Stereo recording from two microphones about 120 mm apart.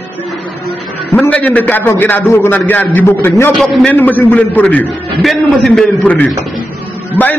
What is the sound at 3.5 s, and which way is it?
A man's voice, 5° left (ahead or behind).